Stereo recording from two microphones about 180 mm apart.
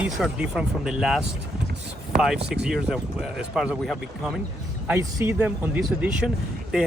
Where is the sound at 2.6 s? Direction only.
5° right (ahead or behind).